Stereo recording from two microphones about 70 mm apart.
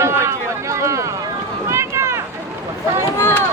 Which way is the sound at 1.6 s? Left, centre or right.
Right.